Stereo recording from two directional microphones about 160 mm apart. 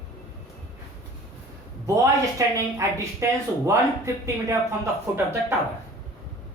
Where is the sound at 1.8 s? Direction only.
20° right (ahead or behind).